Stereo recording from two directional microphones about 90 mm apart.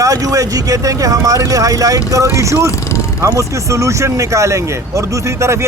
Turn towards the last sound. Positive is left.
turn(degrees=-30)  # may be behind; listen again after turning